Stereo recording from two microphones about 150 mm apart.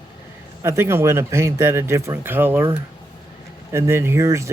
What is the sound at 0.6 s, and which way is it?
Speech, 15° right (ahead or behind).